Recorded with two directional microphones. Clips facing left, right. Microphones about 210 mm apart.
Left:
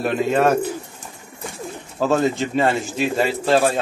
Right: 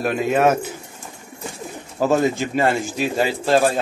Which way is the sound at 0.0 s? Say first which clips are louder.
Even; 10° right (ahead or behind).